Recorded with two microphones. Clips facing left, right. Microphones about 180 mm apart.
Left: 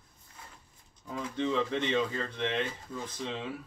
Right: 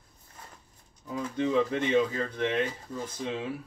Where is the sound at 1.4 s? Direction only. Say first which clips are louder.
Right 4 dB; 10° right (ahead or behind).